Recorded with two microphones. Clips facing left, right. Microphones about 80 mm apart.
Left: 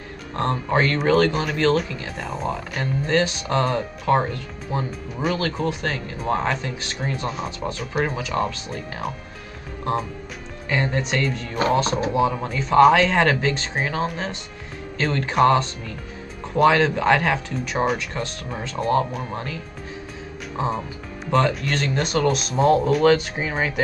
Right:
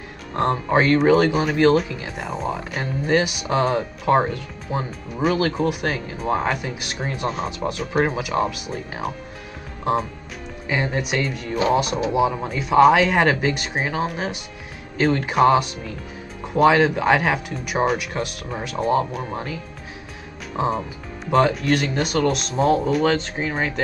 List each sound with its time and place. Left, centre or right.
0.4 s speech: centre
10.7 s speech: centre